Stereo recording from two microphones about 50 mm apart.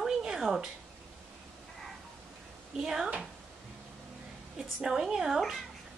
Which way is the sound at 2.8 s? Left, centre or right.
Centre.